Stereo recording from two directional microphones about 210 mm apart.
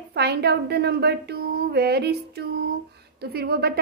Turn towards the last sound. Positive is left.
turn(degrees=-50)  # may be behind; listen again after turning